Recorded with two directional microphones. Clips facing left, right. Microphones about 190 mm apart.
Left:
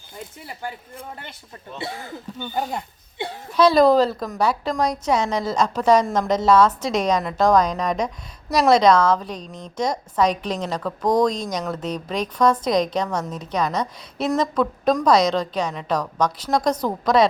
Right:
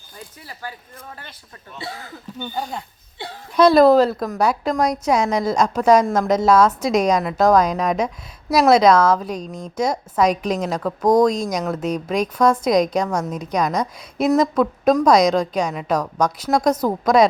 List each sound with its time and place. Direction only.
0.2 s speech: 25° left (ahead or behind)
2.4 s speech: centre (ahead or behind)
3.5 s a woman's voice: 10° right (ahead or behind)